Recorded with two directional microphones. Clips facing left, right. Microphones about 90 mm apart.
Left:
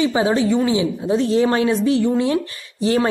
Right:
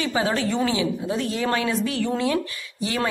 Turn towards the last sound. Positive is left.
turn(degrees=35)  # may be behind; listen again after turning